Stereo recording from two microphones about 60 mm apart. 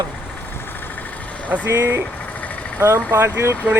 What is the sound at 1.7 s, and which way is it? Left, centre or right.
Speech, right.